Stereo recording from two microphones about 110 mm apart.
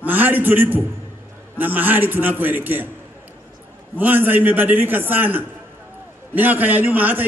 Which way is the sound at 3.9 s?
15° right (ahead or behind).